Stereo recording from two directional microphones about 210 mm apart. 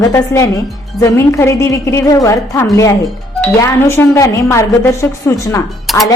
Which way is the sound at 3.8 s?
10° left (ahead or behind).